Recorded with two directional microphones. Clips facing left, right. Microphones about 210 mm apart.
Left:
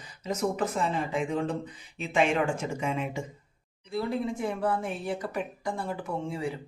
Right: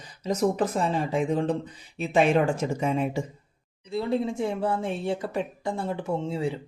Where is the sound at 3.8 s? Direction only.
25° right (ahead or behind).